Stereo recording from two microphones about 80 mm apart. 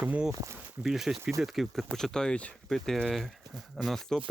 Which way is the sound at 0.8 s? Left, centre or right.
Centre.